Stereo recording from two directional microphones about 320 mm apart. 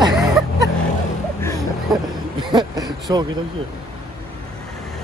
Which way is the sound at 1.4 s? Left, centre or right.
Centre.